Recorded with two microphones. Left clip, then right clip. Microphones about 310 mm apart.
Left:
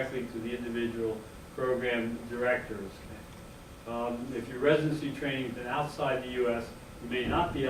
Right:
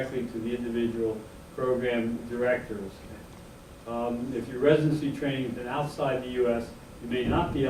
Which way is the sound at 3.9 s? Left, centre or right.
Centre.